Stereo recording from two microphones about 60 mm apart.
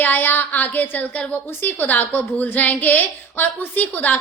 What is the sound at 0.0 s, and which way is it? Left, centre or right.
A woman's voice, left.